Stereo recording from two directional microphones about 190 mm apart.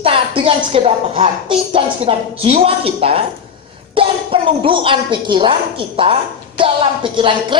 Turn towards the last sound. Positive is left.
turn(degrees=-25)  # may be behind; listen again after turning